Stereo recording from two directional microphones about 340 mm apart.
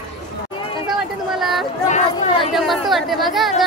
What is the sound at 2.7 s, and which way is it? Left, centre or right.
Speech, centre.